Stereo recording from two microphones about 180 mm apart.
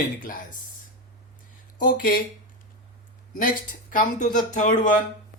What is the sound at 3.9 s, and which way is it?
Speech, 45° left (ahead or behind).